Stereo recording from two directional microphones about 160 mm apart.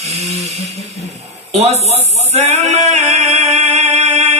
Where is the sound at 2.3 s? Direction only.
45° right (ahead or behind).